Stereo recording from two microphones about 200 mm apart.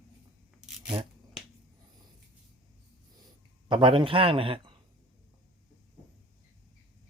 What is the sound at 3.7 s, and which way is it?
A man's voice, 25° right (ahead or behind).